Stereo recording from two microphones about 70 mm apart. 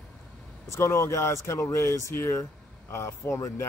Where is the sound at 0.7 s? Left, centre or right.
Left.